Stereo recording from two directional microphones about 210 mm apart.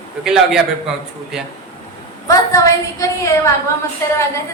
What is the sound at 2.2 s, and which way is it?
A woman's voice, 15° left (ahead or behind).